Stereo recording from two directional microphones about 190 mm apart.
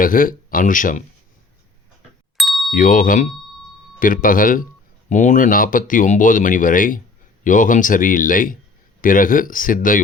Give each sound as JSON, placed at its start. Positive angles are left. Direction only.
{"t": 0.0, "sound": "speech", "side_deg": 45}
{"t": 2.4, "sound": "ding", "side_deg": 0}
{"t": 2.7, "sound": "speech", "side_deg": 45}